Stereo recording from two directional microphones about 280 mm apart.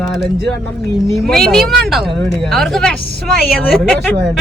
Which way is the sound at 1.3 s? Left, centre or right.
Centre.